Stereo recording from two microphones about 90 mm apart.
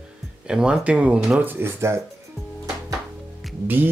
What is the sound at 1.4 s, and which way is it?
Speech, 25° right (ahead or behind).